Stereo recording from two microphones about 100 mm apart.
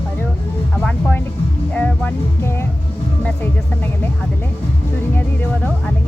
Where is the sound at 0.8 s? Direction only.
5° left (ahead or behind).